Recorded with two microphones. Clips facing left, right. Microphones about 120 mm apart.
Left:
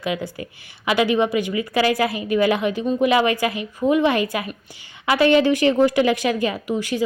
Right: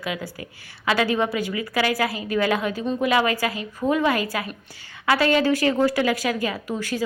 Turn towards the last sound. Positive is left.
turn(degrees=20)  # may be behind; listen again after turning